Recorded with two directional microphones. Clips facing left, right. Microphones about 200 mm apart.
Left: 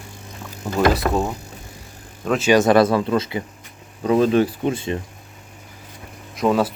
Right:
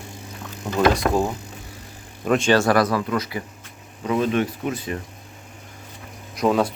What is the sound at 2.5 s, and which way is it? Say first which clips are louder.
Speech: left 5 dB; 20° left (ahead or behind).